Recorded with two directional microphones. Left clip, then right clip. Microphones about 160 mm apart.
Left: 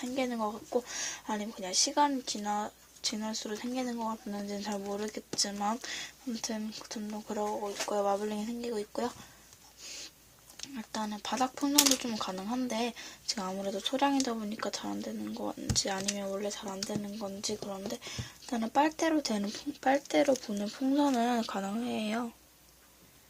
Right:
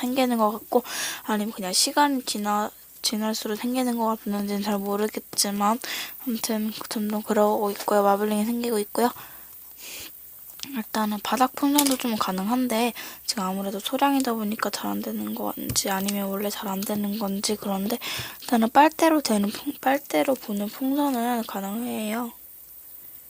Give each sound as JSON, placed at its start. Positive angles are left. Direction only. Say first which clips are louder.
{"t": 0.0, "sound": "speech", "louder": "right 11 dB", "side_deg": -50}
{"t": 10.6, "sound": "speech", "louder": "right 10 dB", "side_deg": -40}